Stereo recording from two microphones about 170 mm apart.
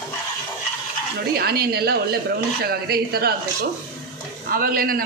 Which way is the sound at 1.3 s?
65° right (ahead or behind).